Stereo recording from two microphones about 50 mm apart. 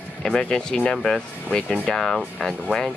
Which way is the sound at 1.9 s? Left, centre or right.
Centre.